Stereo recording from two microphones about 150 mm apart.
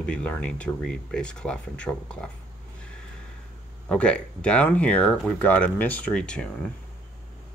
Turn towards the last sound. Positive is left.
turn(degrees=5)  # may be behind; listen again after turning